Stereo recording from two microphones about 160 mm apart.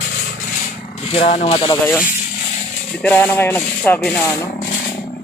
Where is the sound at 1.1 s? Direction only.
40° left (ahead or behind).